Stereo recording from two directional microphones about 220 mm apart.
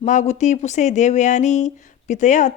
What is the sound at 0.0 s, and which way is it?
Speech, 35° left (ahead or behind).